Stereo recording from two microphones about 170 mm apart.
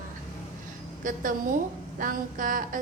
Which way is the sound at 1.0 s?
50° right (ahead or behind).